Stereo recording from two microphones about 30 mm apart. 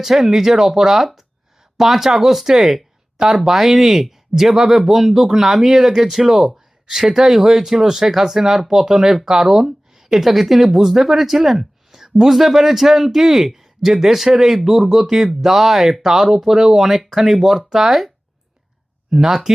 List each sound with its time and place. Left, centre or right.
0.0 s a man's voice: centre
3.2 s a man's voice: right
19.1 s a man's voice: centre